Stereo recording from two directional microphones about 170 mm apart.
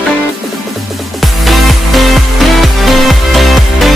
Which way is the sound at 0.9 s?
Centre (ahead or behind).